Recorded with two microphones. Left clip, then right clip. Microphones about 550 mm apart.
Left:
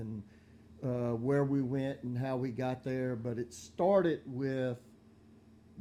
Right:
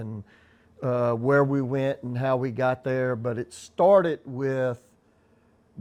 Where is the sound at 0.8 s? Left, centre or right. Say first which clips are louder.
Right 11 dB; right.